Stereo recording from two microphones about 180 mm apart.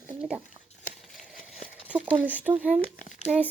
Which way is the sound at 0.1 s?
5° right (ahead or behind).